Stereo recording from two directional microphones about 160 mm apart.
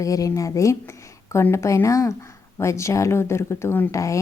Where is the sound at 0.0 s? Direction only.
20° left (ahead or behind).